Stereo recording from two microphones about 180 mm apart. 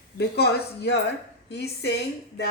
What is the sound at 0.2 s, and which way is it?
A woman's voice, 65° left (ahead or behind).